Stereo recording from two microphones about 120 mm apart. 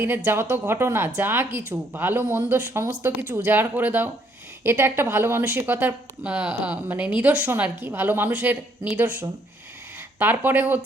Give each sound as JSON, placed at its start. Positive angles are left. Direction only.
{"t": 0.3, "sound": "a woman's voice", "side_deg": -15}